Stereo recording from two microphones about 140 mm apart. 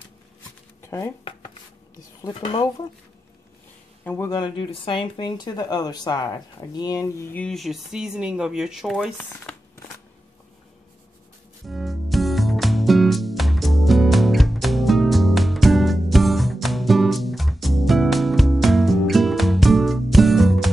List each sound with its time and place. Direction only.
0.8 s speech: 20° left (ahead or behind)
4.0 s speech: 15° left (ahead or behind)
4.3 s speech: 35° left (ahead or behind); by 7.4 s 20° left (ahead or behind)
7.4 s speech: centre (ahead or behind)
9.2 s crumpling: 15° left (ahead or behind)
11.6 s music: centre (ahead or behind)